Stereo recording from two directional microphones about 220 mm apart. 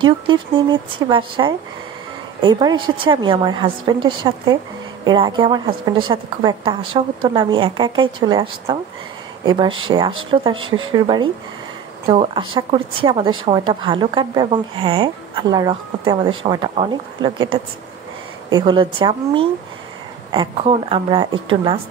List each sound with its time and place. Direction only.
0.0 s a woman's voice: 20° right (ahead or behind)
10.5 s speech: 65° right (ahead or behind)
12.1 s a woman's voice: 25° right (ahead or behind)